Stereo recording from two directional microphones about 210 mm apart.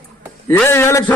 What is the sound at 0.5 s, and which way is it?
Speech, 10° left (ahead or behind).